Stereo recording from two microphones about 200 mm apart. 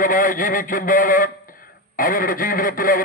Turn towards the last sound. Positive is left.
turn(degrees=45)  # may be behind; listen again after turning